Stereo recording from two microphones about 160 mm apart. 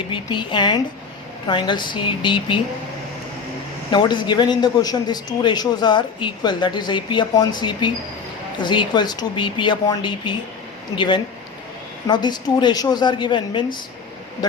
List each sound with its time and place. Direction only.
0.1 s speech: 30° left (ahead or behind)
3.9 s speech: 30° left (ahead or behind)